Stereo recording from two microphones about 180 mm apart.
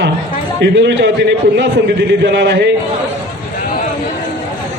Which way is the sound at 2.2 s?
75° right (ahead or behind).